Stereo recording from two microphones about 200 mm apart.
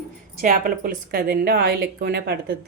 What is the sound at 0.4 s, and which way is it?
A woman's voice, 40° right (ahead or behind).